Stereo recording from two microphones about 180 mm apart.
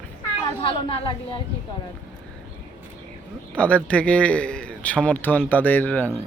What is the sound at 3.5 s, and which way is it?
Speech, 5° left (ahead or behind).